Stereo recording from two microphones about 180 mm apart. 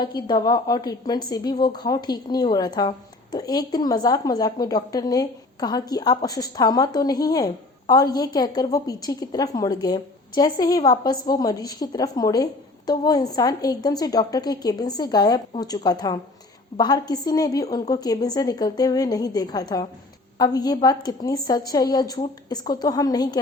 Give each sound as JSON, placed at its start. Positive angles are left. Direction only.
{"t": 0.0, "sound": "a woman's voice", "side_deg": 25}